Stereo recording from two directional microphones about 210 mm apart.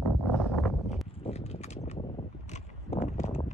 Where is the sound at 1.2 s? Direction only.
30° left (ahead or behind).